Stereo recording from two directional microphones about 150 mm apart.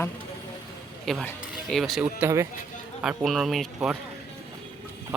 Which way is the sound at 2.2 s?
20° right (ahead or behind).